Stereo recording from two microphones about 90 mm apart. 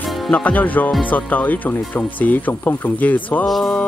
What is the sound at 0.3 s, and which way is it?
Speech, 15° left (ahead or behind).